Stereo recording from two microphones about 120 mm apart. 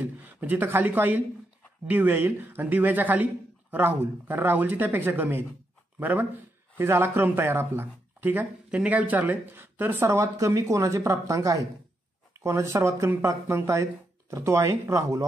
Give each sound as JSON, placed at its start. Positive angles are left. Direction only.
{"t": 0.0, "sound": "speech", "side_deg": -15}